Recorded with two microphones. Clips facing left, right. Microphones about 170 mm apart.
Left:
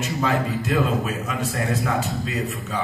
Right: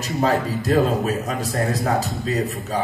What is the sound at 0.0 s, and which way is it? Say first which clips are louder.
A man's voice: right 3 dB; 35° right (ahead or behind).